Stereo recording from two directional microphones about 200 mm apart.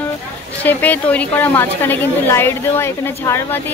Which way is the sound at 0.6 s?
10° left (ahead or behind).